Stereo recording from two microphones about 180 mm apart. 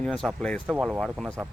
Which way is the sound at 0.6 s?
5° right (ahead or behind).